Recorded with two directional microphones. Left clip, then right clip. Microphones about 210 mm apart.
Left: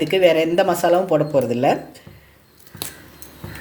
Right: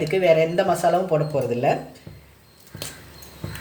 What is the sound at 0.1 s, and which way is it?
Speech, 45° left (ahead or behind).